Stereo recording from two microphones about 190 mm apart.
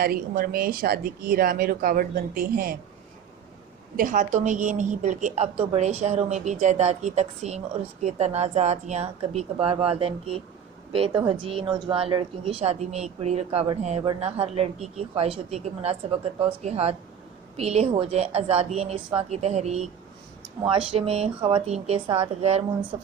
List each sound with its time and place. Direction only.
0.0 s speech: 50° right (ahead or behind)
3.9 s a woman's voice: 45° right (ahead or behind)